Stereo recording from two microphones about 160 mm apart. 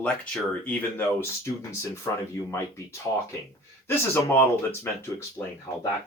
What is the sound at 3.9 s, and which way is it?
Speech, 15° left (ahead or behind).